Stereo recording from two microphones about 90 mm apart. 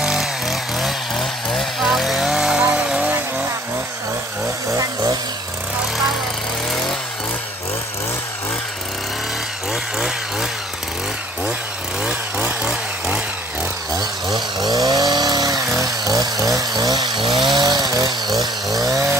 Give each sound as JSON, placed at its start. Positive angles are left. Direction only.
{"t": 0.0, "sound": "chainsaw", "side_deg": -5}
{"t": 4.7, "sound": "chainsaw", "side_deg": -40}
{"t": 14.3, "sound": "chainsaw", "side_deg": -50}